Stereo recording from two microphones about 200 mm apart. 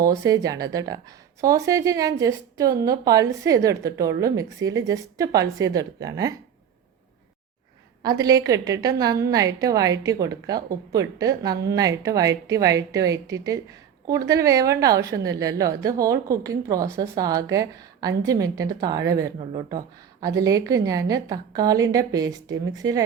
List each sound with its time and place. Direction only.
0.0 s a woman's voice: 15° right (ahead or behind)
8.0 s a woman's voice: 20° right (ahead or behind)
19.4 s a woman's voice: 25° right (ahead or behind)